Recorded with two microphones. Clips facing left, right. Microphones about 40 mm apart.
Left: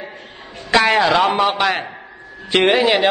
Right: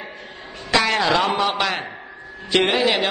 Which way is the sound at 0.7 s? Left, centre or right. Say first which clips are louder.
Left 4 dB; centre.